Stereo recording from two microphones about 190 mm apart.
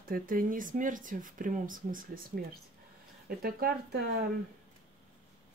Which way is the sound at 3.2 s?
50° right (ahead or behind).